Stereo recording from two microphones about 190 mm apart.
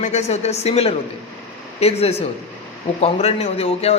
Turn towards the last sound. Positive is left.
turn(degrees=30)  # may be behind; listen again after turning